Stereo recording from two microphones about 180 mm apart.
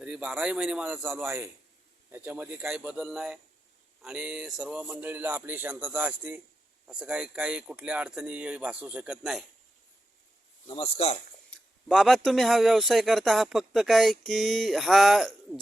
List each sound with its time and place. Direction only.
0.0 s speech: 5° right (ahead or behind)
10.7 s speech: 30° left (ahead or behind)
11.5 s speech: centre (ahead or behind)